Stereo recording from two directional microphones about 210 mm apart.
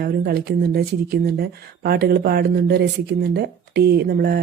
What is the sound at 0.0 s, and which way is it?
Speech, 45° right (ahead or behind).